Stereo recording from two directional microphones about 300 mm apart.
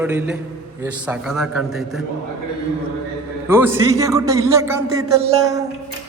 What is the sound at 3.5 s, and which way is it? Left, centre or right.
A man's voice, centre.